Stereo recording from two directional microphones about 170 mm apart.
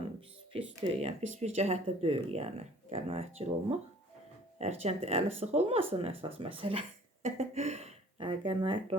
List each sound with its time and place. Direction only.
0.5 s speech: 40° right (ahead or behind)